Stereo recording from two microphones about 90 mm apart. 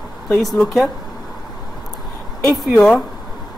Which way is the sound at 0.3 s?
Centre (ahead or behind).